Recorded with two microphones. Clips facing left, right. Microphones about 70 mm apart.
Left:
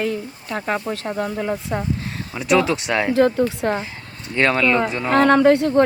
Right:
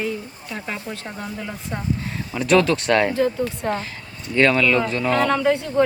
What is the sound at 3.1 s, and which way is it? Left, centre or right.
Speech, left.